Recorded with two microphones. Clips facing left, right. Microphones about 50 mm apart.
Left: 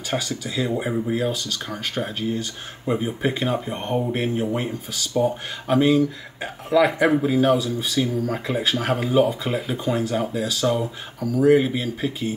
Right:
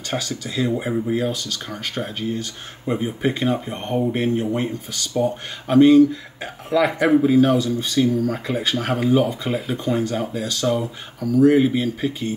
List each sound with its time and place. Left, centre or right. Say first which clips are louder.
0.1 s speech: even; centre